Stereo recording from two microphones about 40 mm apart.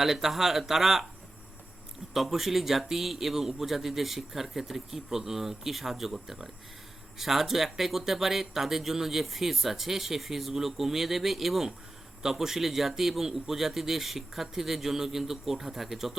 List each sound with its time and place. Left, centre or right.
0.0 s a man's voice: centre
2.1 s a man's voice: centre